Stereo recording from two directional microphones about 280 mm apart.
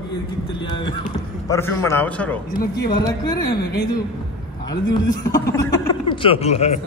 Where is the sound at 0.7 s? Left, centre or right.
Centre.